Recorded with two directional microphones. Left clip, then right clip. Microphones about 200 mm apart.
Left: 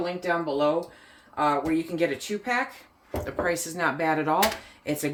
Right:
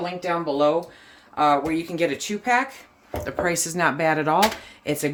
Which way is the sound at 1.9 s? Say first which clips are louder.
Right 2 dB; 55° right (ahead or behind).